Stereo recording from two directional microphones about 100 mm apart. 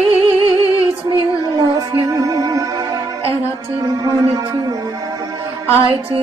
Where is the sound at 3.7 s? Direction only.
35° right (ahead or behind).